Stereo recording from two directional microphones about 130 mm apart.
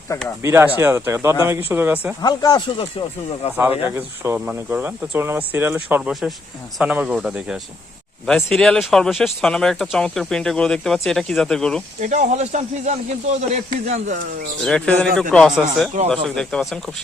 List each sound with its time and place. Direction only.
0.1 s speech: 25° left (ahead or behind)
0.4 s speech: 20° right (ahead or behind)
2.2 s speech: 30° left (ahead or behind)
3.5 s speech: 15° right (ahead or behind); by 11.8 s 5° left (ahead or behind)
11.9 s speech: 65° right (ahead or behind)
14.6 s speech: 5° left (ahead or behind)